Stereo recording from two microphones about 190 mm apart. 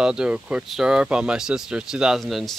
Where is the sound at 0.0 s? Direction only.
5° right (ahead or behind).